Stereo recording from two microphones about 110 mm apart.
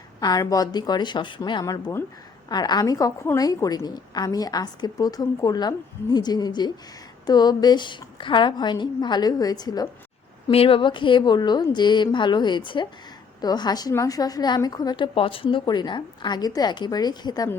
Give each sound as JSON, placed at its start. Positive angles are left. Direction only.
{"t": 0.2, "sound": "a woman's voice", "side_deg": 35}
{"t": 1.7, "sound": "speech", "side_deg": 25}
{"t": 2.5, "sound": "a woman's voice", "side_deg": 40}
{"t": 10.5, "sound": "a woman's voice", "side_deg": 55}